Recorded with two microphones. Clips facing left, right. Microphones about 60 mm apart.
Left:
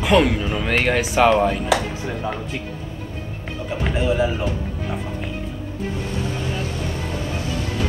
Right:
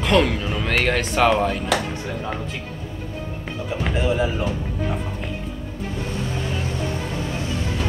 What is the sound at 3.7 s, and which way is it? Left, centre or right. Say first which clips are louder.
Speech: left 1 dB; centre.